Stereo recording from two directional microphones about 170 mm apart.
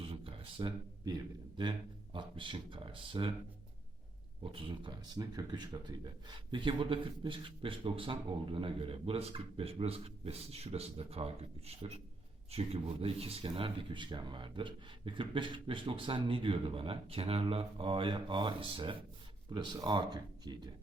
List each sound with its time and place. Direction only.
0.0 s a sound: 35° right (ahead or behind)
2.1 s speech: 30° right (ahead or behind)
4.5 s speech: 30° right (ahead or behind)